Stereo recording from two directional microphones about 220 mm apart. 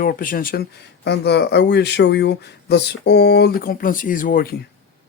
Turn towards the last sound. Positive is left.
turn(degrees=40)  # may be behind; listen again after turning